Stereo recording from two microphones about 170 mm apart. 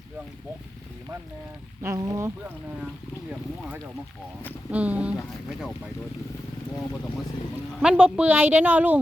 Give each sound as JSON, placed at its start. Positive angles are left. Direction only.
{"t": 1.8, "sound": "speech", "side_deg": -20}
{"t": 4.7, "sound": "speech", "side_deg": -10}
{"t": 7.8, "sound": "speech", "side_deg": -5}